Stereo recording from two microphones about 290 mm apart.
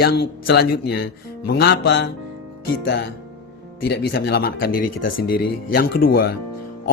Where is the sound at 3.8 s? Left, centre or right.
Left.